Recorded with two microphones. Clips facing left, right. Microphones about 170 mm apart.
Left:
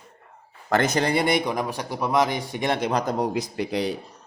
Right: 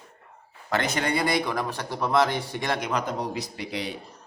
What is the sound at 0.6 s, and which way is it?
Speech, 45° left (ahead or behind).